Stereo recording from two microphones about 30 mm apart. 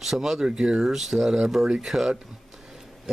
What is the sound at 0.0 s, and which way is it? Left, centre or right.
Speech, centre.